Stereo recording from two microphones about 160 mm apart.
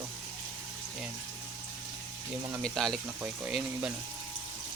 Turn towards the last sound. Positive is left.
turn(degrees=-5)  # may be behind; listen again after turning